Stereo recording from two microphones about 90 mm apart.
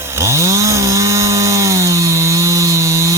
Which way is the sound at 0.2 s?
30° right (ahead or behind).